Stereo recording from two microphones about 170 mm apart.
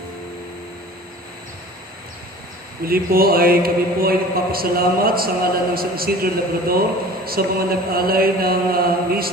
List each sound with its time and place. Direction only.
2.8 s a man's voice: 60° right (ahead or behind)